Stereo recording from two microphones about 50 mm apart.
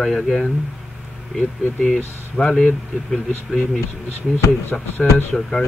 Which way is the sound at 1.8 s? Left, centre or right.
Centre.